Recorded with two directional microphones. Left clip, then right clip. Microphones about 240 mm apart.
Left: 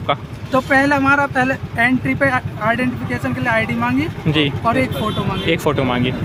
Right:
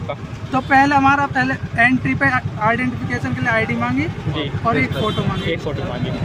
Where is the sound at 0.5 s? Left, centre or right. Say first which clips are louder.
Right 1 dB; centre.